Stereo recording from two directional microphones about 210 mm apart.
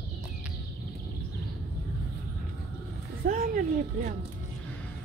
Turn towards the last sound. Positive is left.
turn(degrees=-40)  # may be behind; listen again after turning